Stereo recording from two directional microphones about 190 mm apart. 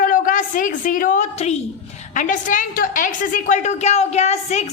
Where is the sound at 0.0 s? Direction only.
45° left (ahead or behind).